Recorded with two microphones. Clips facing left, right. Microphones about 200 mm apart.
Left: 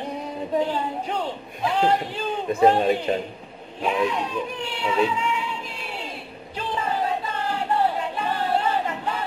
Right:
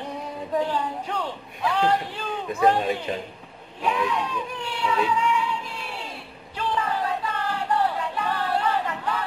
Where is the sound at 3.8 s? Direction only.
25° left (ahead or behind).